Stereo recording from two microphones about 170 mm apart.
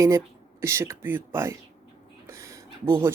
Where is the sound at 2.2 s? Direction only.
15° right (ahead or behind).